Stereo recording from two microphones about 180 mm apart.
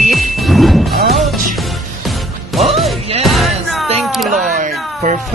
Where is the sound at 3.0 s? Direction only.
35° right (ahead or behind).